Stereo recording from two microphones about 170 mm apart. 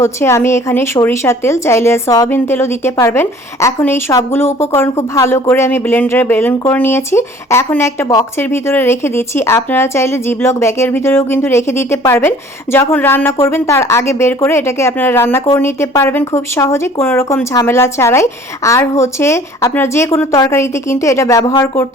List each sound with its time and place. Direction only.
0.0 s a woman's voice: 15° left (ahead or behind)